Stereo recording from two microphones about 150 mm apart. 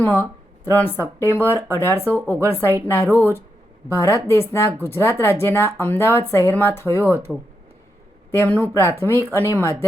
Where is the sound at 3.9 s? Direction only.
20° left (ahead or behind).